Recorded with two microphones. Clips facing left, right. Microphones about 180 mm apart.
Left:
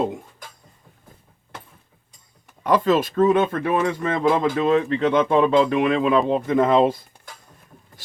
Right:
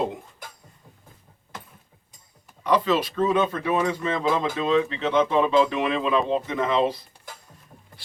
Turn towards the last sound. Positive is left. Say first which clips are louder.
# left 6 dB
turn(degrees=50)  # may be behind; listen again after turning